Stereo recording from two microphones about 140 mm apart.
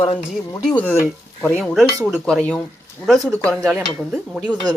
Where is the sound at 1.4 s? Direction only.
Centre (ahead or behind).